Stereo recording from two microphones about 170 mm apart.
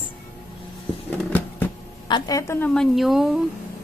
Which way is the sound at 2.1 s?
20° left (ahead or behind).